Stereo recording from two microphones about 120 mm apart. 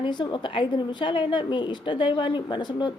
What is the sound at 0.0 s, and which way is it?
A woman's voice, 40° left (ahead or behind).